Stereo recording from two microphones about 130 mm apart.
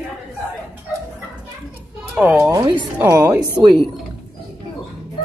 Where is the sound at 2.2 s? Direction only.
15° right (ahead or behind).